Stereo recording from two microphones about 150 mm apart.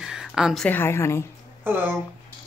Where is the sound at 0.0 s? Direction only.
5° right (ahead or behind).